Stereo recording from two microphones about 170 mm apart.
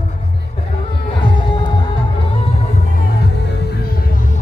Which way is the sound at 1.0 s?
30° left (ahead or behind).